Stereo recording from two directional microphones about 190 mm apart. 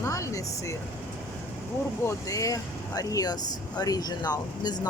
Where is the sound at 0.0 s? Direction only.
15° left (ahead or behind).